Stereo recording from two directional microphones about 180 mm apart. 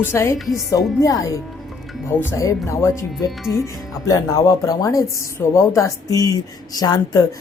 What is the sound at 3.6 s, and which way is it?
Speech, 20° left (ahead or behind).